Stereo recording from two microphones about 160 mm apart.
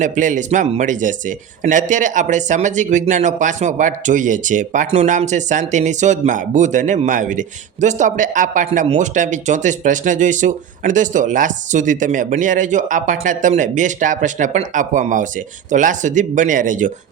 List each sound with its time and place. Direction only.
0.0 s speech: 50° right (ahead or behind)